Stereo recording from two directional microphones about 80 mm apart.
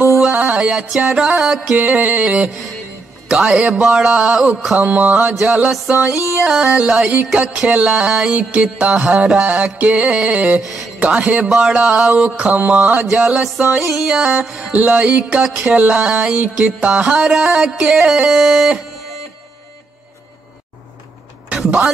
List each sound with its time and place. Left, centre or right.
0.3 s music: centre
1.8 s music: centre
10.6 s music: centre
11.0 s music: centre
21.5 s a sound: centre